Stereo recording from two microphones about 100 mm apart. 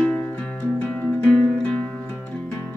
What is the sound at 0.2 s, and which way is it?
Music, 15° left (ahead or behind).